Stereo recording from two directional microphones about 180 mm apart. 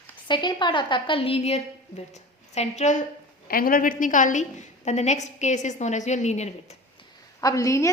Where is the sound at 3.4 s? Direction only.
55° left (ahead or behind).